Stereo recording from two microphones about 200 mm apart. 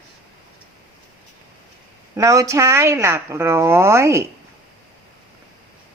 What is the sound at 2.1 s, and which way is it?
Speech, 15° right (ahead or behind).